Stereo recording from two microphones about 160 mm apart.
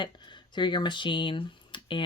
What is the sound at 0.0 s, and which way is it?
Speech, 30° left (ahead or behind).